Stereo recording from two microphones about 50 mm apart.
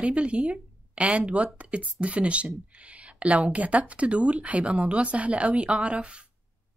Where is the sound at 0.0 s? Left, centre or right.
Right.